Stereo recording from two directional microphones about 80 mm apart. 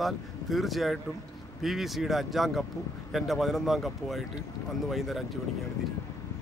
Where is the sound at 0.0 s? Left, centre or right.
Centre.